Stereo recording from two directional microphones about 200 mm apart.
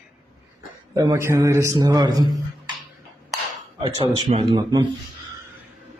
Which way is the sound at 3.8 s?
20° right (ahead or behind).